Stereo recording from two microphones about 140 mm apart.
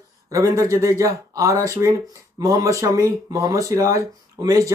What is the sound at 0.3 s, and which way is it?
Speech, 20° right (ahead or behind).